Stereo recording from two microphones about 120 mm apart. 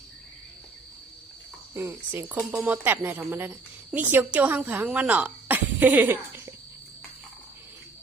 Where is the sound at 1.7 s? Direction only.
20° right (ahead or behind).